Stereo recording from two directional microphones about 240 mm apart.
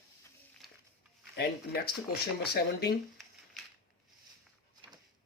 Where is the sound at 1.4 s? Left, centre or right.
Left.